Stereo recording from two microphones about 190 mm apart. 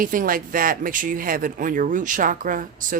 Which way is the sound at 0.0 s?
45° right (ahead or behind).